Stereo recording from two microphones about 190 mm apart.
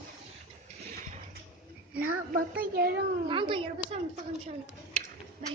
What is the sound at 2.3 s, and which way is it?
Speech, 50° right (ahead or behind).